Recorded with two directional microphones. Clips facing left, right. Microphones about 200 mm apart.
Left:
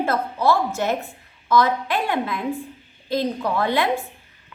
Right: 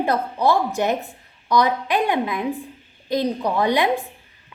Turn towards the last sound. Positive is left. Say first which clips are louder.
# right 2 dB
turn(degrees=-15)  # may be behind; listen again after turning